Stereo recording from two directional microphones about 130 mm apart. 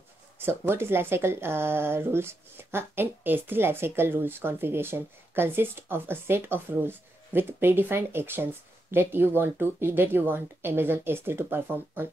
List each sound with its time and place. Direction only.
0.4 s speech: 20° right (ahead or behind)